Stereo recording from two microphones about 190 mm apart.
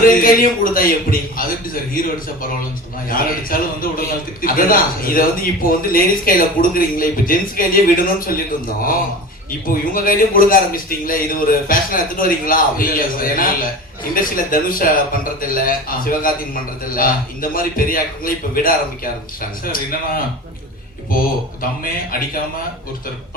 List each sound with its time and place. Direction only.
0.0 s a man's voice: 50° left (ahead or behind)
9.5 s a man's voice: 50° left (ahead or behind)